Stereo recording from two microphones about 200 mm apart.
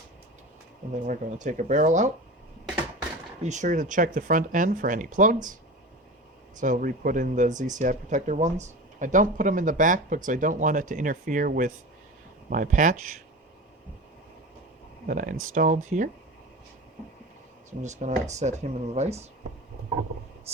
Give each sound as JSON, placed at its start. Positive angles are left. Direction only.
{"t": 1.0, "sound": "speech", "side_deg": -40}
{"t": 3.4, "sound": "speech", "side_deg": -35}
{"t": 6.6, "sound": "speech", "side_deg": -40}
{"t": 15.0, "sound": "speech", "side_deg": -40}
{"t": 17.8, "sound": "speech", "side_deg": -35}